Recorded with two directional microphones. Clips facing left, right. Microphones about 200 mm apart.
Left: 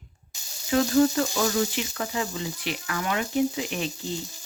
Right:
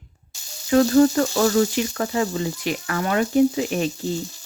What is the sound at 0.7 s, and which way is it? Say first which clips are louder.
Speech: right 5 dB; 50° right (ahead or behind).